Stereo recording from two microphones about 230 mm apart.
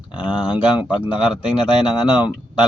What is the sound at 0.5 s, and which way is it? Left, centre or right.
Speech, centre.